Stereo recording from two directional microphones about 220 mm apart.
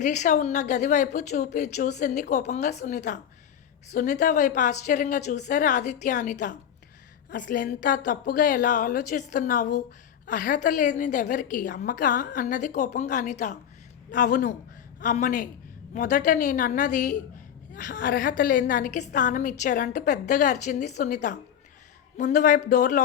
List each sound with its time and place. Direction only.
0.0 s a woman's voice: 35° left (ahead or behind)